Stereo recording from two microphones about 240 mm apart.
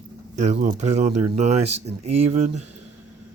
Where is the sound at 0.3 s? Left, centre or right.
Right.